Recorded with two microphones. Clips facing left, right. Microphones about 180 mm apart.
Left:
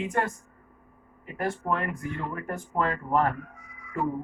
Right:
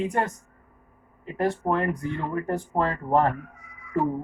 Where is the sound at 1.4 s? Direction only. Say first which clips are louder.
Right 5 dB; 35° right (ahead or behind).